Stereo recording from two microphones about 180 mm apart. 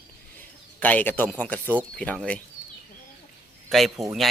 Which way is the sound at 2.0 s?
5° left (ahead or behind).